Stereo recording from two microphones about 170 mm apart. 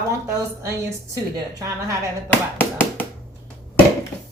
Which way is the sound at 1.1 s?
15° right (ahead or behind).